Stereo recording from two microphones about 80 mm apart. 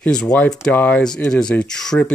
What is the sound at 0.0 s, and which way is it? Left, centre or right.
Speech, centre.